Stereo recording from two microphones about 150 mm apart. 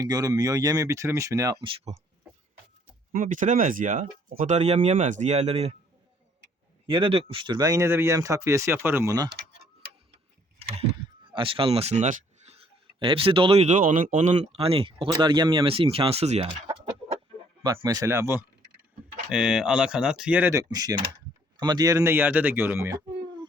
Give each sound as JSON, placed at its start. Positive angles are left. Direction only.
{"t": 0.0, "sound": "speech", "side_deg": -25}
{"t": 1.6, "sound": "speech", "side_deg": -40}
{"t": 3.1, "sound": "speech", "side_deg": -65}
{"t": 6.8, "sound": "speech", "side_deg": -35}
{"t": 10.6, "sound": "rowboat", "side_deg": -45}
{"t": 11.3, "sound": "speech", "side_deg": -35}
{"t": 17.8, "sound": "speech", "side_deg": -20}
{"t": 19.3, "sound": "speech", "side_deg": -5}
{"t": 20.5, "sound": "speech", "side_deg": -25}